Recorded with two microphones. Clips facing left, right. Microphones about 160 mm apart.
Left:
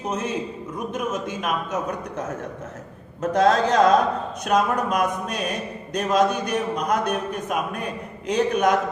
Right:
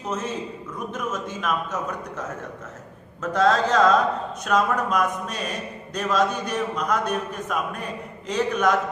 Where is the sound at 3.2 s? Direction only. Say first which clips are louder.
Left 2 dB; 15° left (ahead or behind).